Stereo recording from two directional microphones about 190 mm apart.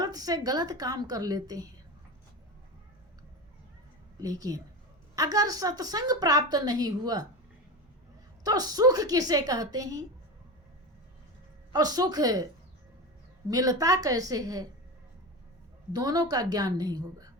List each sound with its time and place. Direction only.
0.0 s a woman's voice: 20° right (ahead or behind)
4.2 s a woman's voice: 20° right (ahead or behind)
8.4 s a woman's voice: 20° right (ahead or behind)
11.7 s a woman's voice: 20° right (ahead or behind)
13.5 s a woman's voice: 20° right (ahead or behind)
15.9 s a woman's voice: 20° right (ahead or behind)